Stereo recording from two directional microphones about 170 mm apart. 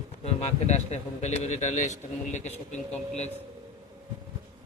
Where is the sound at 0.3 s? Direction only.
40° left (ahead or behind).